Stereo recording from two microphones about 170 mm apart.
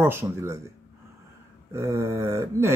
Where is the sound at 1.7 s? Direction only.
15° right (ahead or behind).